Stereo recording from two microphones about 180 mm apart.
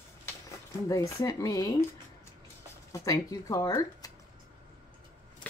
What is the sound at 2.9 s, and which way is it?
A woman's voice, 20° left (ahead or behind).